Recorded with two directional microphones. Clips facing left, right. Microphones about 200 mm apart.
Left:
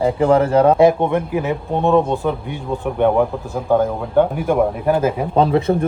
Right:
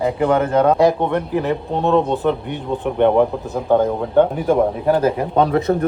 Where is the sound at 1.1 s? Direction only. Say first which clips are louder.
Even; 10° left (ahead or behind).